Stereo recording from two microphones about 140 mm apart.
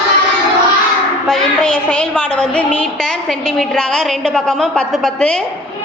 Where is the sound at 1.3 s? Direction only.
5° left (ahead or behind).